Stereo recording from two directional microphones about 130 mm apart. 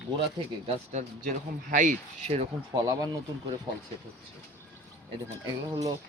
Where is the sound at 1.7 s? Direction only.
80° right.